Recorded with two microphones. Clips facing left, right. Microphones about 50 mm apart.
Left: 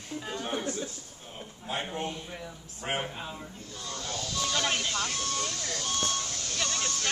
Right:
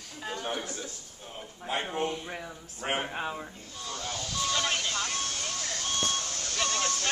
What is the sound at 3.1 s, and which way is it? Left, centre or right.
Speech, right.